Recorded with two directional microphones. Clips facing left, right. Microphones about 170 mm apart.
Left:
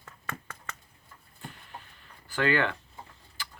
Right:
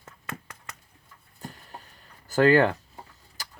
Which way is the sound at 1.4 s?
40° right (ahead or behind).